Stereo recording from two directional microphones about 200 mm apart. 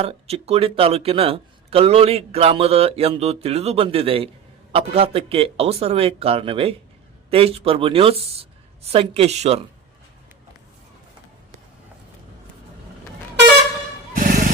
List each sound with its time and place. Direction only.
0.0 s a woman's voice: 30° right (ahead or behind)
14.2 s music: 50° right (ahead or behind)